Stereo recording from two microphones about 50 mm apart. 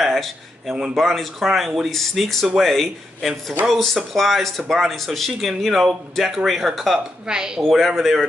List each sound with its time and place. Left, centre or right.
0.0 s a sound: centre
0.9 s speech: centre
7.0 s a woman's voice: centre
7.6 s speech: centre